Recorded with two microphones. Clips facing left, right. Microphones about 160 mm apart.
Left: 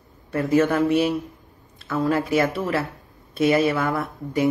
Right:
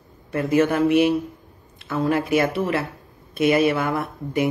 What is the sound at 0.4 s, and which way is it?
Speech, 20° right (ahead or behind).